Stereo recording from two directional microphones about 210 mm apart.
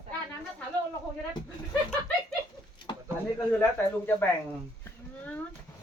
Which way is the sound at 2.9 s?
20° left (ahead or behind).